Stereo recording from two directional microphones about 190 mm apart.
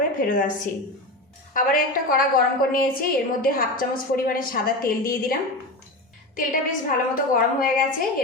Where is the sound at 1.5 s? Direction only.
45° left (ahead or behind).